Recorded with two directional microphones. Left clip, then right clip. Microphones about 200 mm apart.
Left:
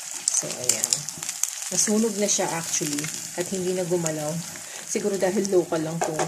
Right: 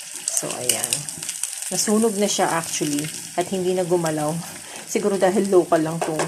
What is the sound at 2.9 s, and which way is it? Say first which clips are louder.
Speech: right 4 dB; 25° left (ahead or behind).